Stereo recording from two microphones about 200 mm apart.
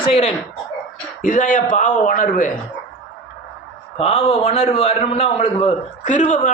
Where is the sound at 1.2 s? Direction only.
40° left (ahead or behind).